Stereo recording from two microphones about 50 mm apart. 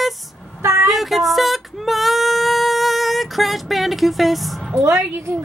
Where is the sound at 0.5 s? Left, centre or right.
Right.